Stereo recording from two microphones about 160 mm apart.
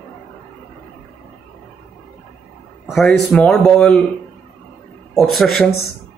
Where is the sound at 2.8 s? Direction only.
Centre (ahead or behind).